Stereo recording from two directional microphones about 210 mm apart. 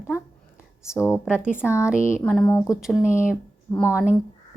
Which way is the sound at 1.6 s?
5° left (ahead or behind).